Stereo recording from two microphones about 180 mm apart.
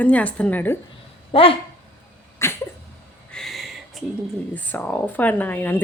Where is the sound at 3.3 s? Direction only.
Centre (ahead or behind).